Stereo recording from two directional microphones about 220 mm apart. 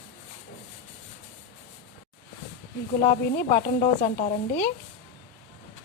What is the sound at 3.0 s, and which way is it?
Speech, 35° left (ahead or behind).